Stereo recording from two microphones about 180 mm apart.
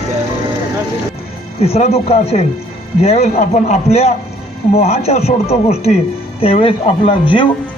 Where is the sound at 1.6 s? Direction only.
35° left (ahead or behind).